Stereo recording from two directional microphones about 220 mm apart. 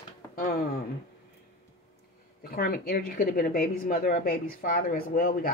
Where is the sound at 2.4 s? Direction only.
45° left (ahead or behind).